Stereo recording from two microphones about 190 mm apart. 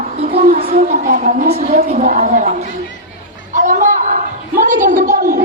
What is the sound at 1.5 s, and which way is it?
A woman's voice, 35° right (ahead or behind).